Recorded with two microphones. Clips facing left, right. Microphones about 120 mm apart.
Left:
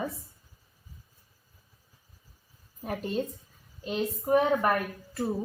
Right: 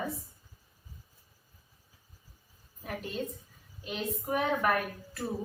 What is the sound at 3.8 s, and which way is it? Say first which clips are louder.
Speech: left 5 dB; 30° left (ahead or behind).